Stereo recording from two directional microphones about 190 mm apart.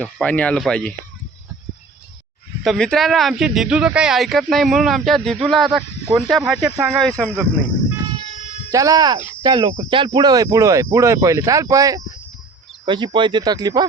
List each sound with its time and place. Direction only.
0.0 s speech: 5° left (ahead or behind)
2.6 s speech: 5° left (ahead or behind)
8.7 s speech: 20° right (ahead or behind)